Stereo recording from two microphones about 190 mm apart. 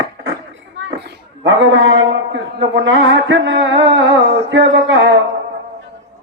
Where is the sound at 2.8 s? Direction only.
85° right.